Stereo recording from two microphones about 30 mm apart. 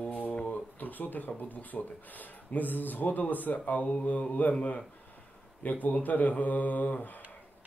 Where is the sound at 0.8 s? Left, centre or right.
Left.